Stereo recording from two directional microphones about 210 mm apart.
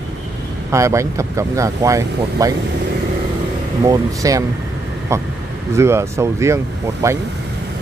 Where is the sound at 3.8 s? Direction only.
15° right (ahead or behind).